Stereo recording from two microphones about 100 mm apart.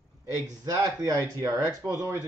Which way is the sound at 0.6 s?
40° right (ahead or behind).